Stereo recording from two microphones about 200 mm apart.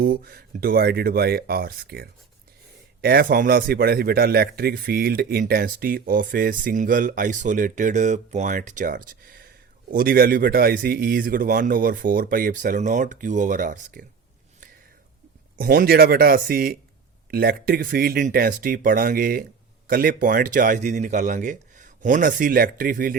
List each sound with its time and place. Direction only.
0.0 s a man's voice: 45° right (ahead or behind)
15.5 s a man's voice: 45° right (ahead or behind)